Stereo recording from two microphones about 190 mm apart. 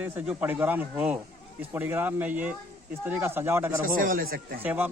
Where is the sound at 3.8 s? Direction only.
45° right (ahead or behind).